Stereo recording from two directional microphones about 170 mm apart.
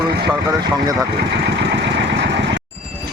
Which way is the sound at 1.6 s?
90° right.